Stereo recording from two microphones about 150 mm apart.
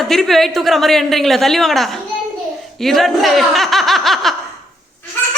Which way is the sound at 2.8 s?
Centre (ahead or behind).